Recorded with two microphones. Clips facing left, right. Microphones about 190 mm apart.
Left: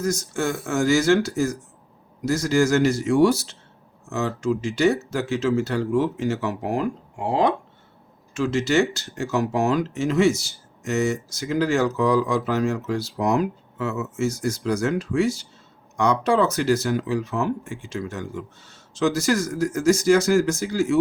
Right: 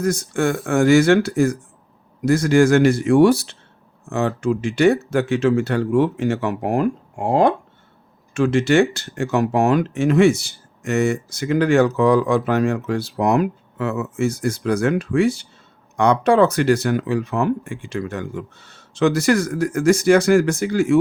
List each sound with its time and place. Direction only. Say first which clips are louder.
0.0 s speech: right 4 dB; 60° right (ahead or behind)